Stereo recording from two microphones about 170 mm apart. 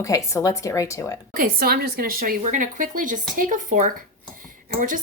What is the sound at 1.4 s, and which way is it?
A woman's voice, 60° right (ahead or behind).